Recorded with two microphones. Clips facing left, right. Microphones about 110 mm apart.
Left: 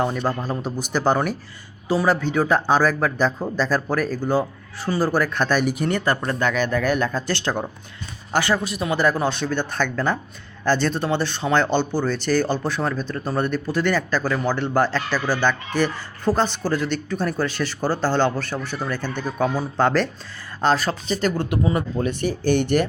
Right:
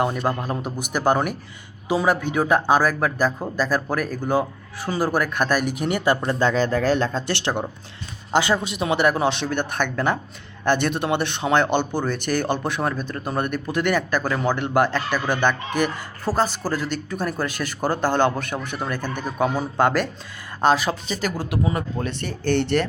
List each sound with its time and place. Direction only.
0.0 s speech: 10° right (ahead or behind)
5.9 s speech: 15° right (ahead or behind)
6.4 s speech: 30° right (ahead or behind); by 22.9 s 5° left (ahead or behind)